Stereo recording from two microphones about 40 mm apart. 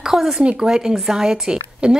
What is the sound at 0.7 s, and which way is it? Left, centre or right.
A woman's voice, centre.